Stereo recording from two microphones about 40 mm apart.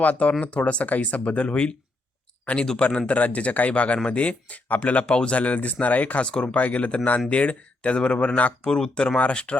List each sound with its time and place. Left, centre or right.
0.0 s speech: left
2.6 s speech: centre
3.1 s speech: left
5.1 s speech: left
5.4 s speech: left
6.3 s speech: left
6.6 s speech: left; by 9.1 s centre
9.1 s speech: left